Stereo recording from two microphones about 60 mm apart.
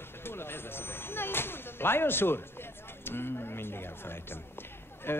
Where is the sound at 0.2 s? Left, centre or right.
Left.